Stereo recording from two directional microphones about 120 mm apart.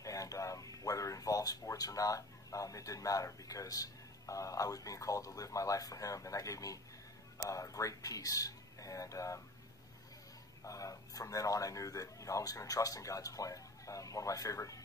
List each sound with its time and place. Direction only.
0.0 s a man's voice: 30° left (ahead or behind)
10.6 s speech: 30° left (ahead or behind)